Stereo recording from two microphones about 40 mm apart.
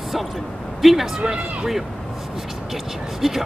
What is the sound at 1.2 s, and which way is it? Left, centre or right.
Speech, right.